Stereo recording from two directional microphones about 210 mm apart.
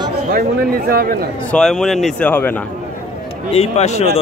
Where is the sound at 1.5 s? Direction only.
Centre (ahead or behind).